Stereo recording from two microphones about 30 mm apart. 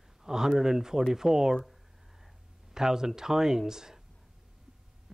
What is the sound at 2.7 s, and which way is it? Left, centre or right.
A man's voice, centre.